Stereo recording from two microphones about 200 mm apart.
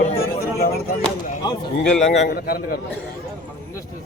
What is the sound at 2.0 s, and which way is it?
Speech, 55° left (ahead or behind).